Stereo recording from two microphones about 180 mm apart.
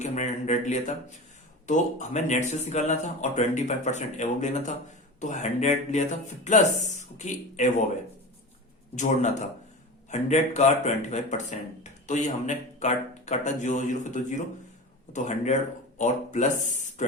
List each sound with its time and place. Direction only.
0.0 s a man's voice: 40° left (ahead or behind)
9.0 s a man's voice: 40° left (ahead or behind)
16.0 s a man's voice: 40° left (ahead or behind)